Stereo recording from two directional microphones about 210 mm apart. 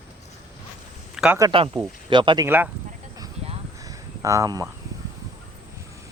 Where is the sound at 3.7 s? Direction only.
15° right (ahead or behind).